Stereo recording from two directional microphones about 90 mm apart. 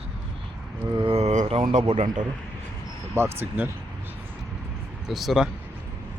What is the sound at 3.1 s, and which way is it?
Speech, 25° right (ahead or behind).